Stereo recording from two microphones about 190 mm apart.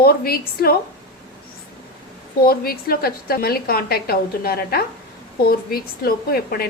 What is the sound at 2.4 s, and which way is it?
A woman's voice, 50° left (ahead or behind).